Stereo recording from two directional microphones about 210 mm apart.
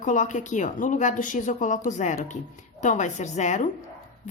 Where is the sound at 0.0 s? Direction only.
35° left (ahead or behind).